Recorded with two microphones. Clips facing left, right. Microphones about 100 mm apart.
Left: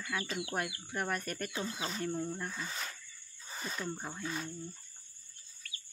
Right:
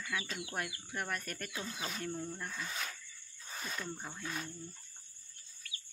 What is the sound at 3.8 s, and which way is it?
Speech, 20° left (ahead or behind).